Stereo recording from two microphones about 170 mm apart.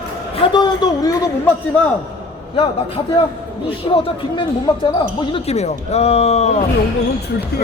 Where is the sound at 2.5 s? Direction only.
30° left (ahead or behind).